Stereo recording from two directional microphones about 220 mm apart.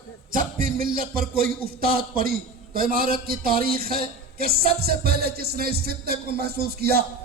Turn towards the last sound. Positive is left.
turn(degrees=-45)  # may be behind; listen again after turning